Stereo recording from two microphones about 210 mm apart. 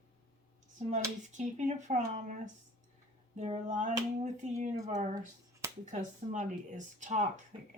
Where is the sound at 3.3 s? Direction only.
35° right (ahead or behind).